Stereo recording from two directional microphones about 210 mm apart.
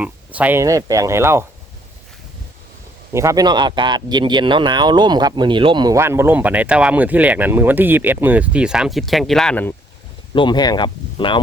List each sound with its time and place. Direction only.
0.0 s speech: 5° right (ahead or behind)
3.1 s speech: 15° right (ahead or behind); by 9.7 s 5° left (ahead or behind)
10.3 s speech: 20° left (ahead or behind)